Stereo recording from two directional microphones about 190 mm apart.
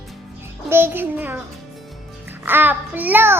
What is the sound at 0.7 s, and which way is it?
Child singing, 10° right (ahead or behind).